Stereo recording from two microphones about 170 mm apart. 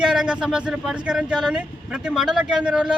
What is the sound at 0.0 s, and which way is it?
Speech, 5° right (ahead or behind).